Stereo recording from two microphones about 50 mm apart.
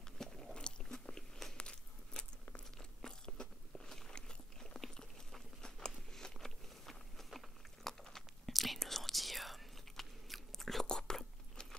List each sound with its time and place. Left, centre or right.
0.2 s biting: centre
1.6 s crunch: centre
5.6 s biting: centre
8.0 s whispering: centre